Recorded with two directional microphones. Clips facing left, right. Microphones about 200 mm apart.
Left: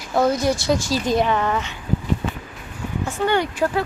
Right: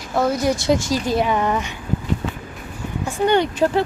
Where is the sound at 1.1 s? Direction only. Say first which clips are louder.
Even; 10° right (ahead or behind).